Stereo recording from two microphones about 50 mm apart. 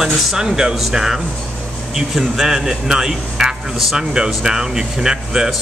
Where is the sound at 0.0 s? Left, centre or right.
Centre.